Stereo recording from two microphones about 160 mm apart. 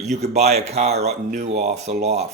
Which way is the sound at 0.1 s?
45° right (ahead or behind).